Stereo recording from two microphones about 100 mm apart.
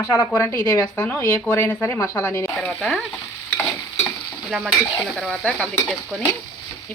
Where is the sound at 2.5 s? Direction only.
5° left (ahead or behind).